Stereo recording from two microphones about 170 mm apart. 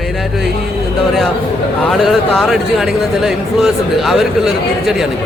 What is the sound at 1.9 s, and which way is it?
Speech, centre (ahead or behind).